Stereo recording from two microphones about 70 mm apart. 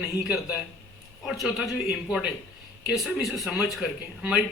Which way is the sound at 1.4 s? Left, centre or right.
Centre.